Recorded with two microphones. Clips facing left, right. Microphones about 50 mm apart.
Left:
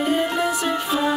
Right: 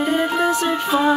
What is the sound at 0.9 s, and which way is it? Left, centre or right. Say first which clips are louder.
Music: right 6 dB; centre.